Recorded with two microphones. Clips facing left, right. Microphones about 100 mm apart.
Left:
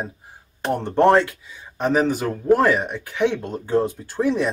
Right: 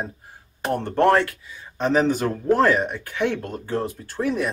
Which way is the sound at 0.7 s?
15° left (ahead or behind).